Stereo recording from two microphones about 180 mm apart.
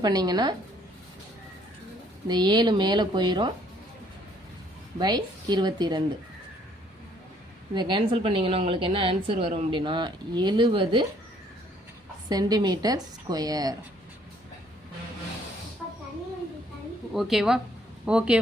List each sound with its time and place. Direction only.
0.0 s a woman's voice: 20° right (ahead or behind)
2.2 s a woman's voice: 25° right (ahead or behind)
4.9 s a woman's voice: 25° right (ahead or behind)
7.8 s a woman's voice: 25° right (ahead or behind)
12.3 s a woman's voice: 20° right (ahead or behind)
17.2 s speech: centre (ahead or behind)